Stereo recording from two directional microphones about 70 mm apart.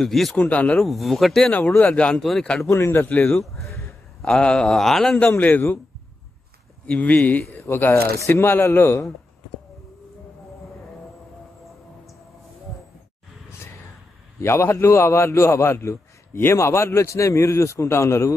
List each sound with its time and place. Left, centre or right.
0.0 s speech: centre
0.4 s speech: centre
0.7 s speech: centre
1.8 s speech: centre
2.7 s speech: left
3.5 s a sound: centre
4.2 s speech: centre
5.2 s speech: left
6.9 s a man's voice: left
14.4 s a man's voice: left